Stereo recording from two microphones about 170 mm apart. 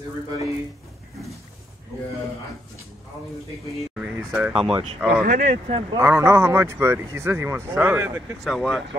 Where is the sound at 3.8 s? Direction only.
Centre (ahead or behind).